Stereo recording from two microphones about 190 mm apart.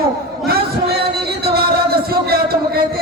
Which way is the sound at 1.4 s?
55° right (ahead or behind).